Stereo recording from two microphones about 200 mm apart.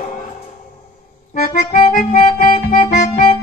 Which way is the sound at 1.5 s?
40° left (ahead or behind).